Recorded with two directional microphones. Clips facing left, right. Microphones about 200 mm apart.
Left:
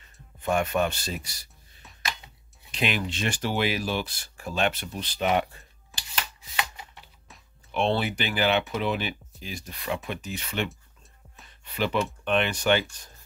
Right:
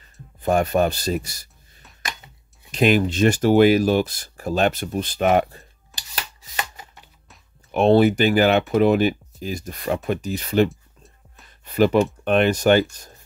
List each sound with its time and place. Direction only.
0.4 s speech: 35° right (ahead or behind)
2.7 s speech: 45° right (ahead or behind)
5.9 s rub: centre (ahead or behind)
7.7 s speech: 45° right (ahead or behind)
10.7 s a sound: centre (ahead or behind)
11.6 s speech: 45° right (ahead or behind)